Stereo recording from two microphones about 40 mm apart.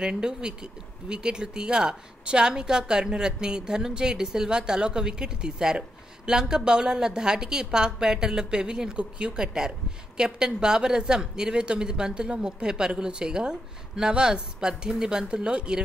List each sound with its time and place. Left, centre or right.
0.0 s speech: centre